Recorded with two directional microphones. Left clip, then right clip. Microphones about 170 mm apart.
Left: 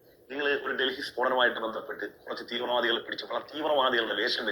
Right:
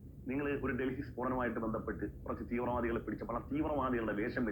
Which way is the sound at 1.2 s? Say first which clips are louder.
Left 11 dB; 15° left (ahead or behind).